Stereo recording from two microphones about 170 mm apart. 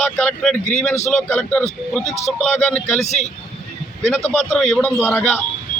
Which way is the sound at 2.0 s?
40° left (ahead or behind).